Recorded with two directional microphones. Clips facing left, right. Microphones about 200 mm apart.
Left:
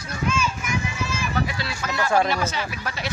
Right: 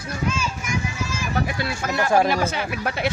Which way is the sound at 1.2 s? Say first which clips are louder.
Right 3 dB; 50° right (ahead or behind).